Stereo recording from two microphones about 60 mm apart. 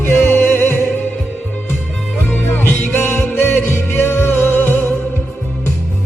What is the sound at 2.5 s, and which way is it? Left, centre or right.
Music, left.